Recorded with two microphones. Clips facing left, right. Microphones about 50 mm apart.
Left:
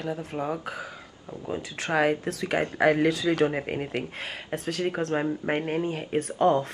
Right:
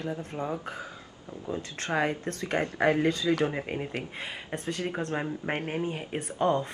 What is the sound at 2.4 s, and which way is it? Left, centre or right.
Speech, centre.